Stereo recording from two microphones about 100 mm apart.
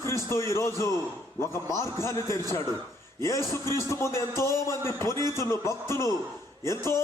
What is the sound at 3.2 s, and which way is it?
A man's voice, 30° left (ahead or behind).